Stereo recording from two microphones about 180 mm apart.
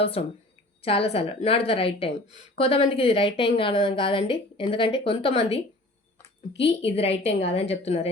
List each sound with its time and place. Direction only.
0.0 s a woman's voice: 30° left (ahead or behind)